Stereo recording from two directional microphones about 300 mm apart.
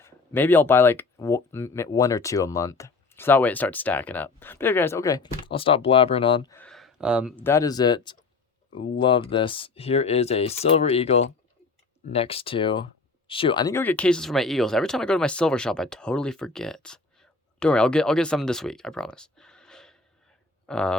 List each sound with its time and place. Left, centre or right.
0.0 s speech: centre